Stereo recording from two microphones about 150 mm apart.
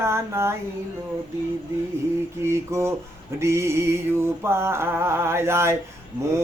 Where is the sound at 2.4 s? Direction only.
15° right (ahead or behind).